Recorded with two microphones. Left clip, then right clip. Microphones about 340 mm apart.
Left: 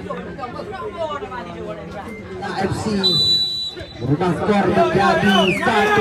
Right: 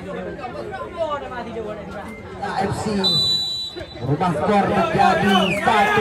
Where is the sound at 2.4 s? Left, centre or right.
Right.